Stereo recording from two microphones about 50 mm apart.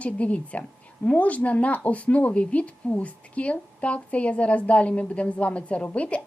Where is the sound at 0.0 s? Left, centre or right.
Left.